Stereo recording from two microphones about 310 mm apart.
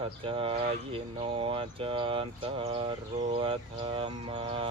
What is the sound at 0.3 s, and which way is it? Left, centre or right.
Speech, centre.